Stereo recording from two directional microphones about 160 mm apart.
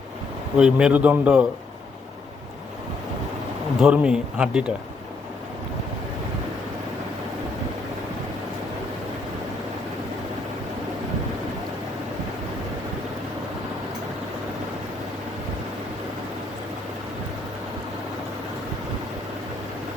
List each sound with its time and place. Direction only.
0.5 s speech: 5° right (ahead or behind)
3.8 s speech: 5° right (ahead or behind)